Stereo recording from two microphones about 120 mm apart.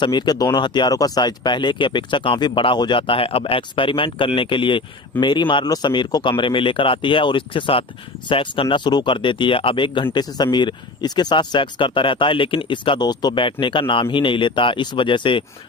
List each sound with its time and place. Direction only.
0.0 s speech: 35° left (ahead or behind)
8.7 s speech: 40° left (ahead or behind)